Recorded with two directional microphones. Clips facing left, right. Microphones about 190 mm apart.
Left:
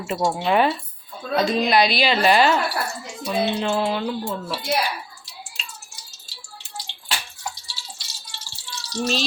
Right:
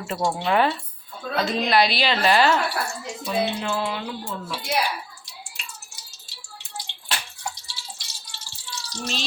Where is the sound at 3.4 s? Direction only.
30° left (ahead or behind).